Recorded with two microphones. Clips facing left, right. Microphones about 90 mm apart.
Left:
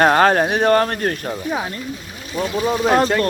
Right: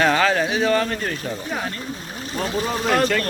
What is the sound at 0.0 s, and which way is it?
Speech, 45° left (ahead or behind).